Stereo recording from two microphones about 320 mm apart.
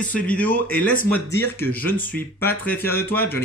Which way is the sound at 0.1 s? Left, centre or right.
Centre.